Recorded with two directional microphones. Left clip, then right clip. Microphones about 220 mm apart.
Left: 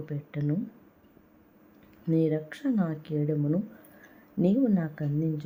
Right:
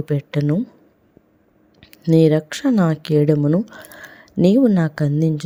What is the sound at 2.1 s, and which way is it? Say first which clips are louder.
Speech: right 12 dB; 45° right (ahead or behind).